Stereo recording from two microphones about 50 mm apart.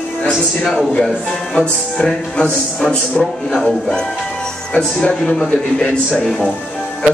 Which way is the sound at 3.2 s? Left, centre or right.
Centre.